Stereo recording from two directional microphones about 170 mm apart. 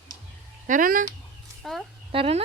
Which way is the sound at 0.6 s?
50° right (ahead or behind).